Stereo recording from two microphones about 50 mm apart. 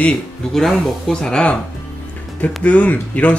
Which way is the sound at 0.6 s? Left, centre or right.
Centre.